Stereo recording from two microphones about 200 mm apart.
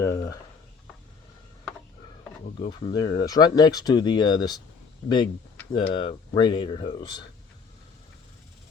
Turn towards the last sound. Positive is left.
turn(degrees=20)  # may be behind; listen again after turning